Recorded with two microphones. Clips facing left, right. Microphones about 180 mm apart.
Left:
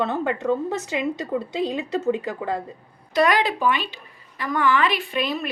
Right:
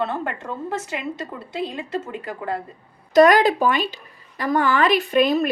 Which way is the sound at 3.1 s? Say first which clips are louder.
Right 6 dB; 45° right (ahead or behind).